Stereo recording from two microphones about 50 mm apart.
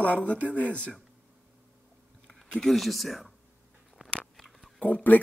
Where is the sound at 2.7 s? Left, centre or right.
Centre.